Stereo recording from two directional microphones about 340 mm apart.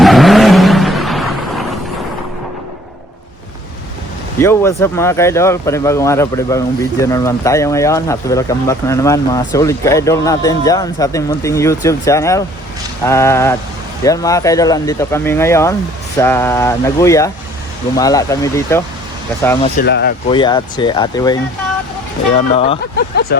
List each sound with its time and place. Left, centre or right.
0.0 s vehicle: centre
4.4 s speech: centre
19.6 s speech: left
20.2 s speech: centre
22.5 s speech: centre
23.0 s speech: left